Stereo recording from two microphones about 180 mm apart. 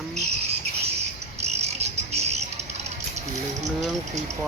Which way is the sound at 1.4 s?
35° right (ahead or behind).